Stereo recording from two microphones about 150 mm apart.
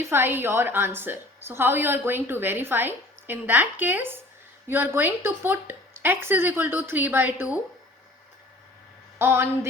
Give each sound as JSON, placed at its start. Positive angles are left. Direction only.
{"t": 0.0, "sound": "a woman's voice", "side_deg": -15}
{"t": 9.1, "sound": "a woman's voice", "side_deg": -15}